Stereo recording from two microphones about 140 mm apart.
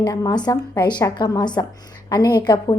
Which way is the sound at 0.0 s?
25° left (ahead or behind).